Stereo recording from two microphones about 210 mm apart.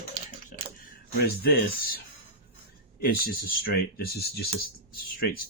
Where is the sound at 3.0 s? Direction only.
45° left (ahead or behind).